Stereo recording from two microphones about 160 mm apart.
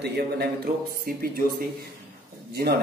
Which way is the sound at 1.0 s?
65° right (ahead or behind).